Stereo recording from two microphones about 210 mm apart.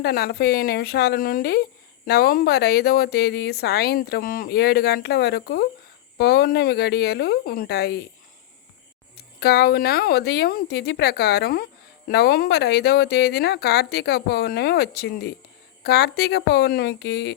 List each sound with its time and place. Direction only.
0.0 s speech: 50° left (ahead or behind)
9.1 s speech: 50° left (ahead or behind)